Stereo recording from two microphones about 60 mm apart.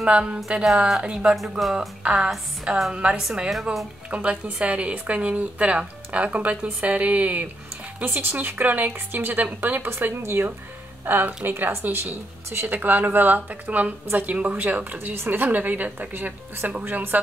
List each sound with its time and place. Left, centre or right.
0.0 s music: centre
1.6 s a woman's voice: centre
2.0 s music: centre
3.2 s a woman's voice: centre
4.1 s a woman's voice: right
8.0 s a woman's voice: right